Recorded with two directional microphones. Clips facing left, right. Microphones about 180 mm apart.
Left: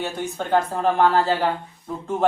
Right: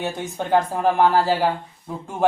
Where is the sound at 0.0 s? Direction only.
15° right (ahead or behind).